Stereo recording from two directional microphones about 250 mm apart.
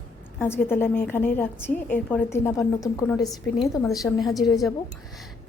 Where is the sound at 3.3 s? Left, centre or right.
Centre.